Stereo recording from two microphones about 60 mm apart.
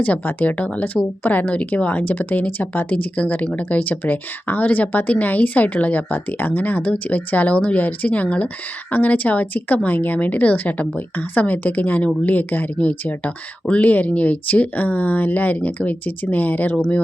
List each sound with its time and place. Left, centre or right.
0.0 s a woman's voice: left